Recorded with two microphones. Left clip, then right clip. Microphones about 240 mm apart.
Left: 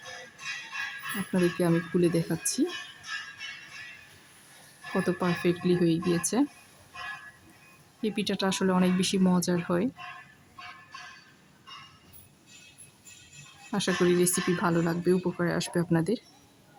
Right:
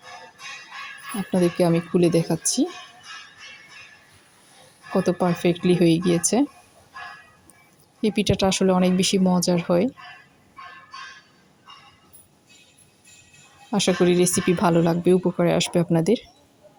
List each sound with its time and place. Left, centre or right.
1.3 s speech: centre
4.9 s speech: centre
8.0 s speech: centre
13.7 s speech: centre